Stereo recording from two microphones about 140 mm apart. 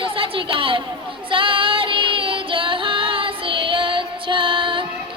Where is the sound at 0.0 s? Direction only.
40° right (ahead or behind).